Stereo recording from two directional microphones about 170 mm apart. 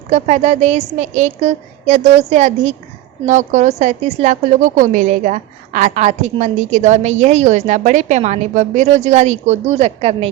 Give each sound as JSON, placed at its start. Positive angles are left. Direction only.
{"t": 0.1, "sound": "a woman's voice", "side_deg": -45}